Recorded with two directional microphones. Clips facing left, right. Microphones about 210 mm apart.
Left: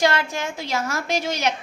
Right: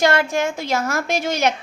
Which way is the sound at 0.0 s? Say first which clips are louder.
Right 4 dB; 50° right (ahead or behind).